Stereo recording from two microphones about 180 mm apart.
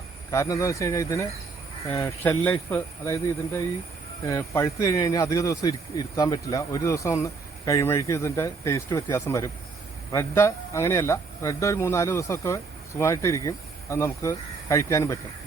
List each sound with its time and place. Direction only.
0.3 s speech: 20° left (ahead or behind)